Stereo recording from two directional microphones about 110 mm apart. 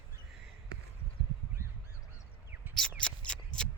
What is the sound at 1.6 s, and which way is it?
Goose, 25° right (ahead or behind).